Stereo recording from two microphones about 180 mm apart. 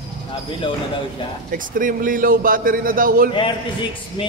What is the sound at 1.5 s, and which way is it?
A man's voice, 50° right (ahead or behind).